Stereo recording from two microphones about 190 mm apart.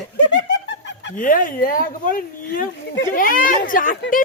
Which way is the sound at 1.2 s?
45° left (ahead or behind).